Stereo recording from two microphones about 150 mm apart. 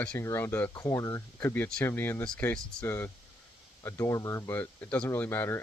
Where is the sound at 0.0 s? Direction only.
10° left (ahead or behind).